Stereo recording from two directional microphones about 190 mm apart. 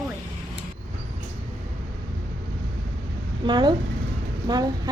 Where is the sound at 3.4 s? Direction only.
25° right (ahead or behind).